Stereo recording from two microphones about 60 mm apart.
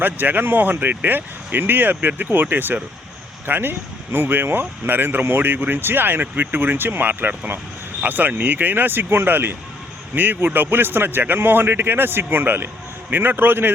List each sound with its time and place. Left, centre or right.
0.0 s speech: right